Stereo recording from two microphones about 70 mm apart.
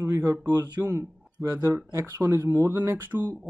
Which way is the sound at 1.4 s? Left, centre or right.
Right.